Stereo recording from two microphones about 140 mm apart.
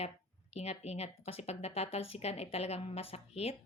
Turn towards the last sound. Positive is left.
turn(degrees=45)  # may be behind; listen again after turning